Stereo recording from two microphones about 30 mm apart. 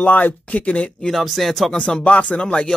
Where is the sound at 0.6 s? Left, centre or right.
Left.